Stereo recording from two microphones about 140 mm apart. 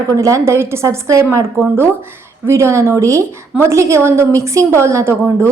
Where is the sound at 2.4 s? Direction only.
20° right (ahead or behind).